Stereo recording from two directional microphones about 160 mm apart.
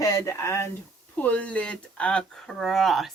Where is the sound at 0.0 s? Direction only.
20° left (ahead or behind); by 3.1 s centre (ahead or behind).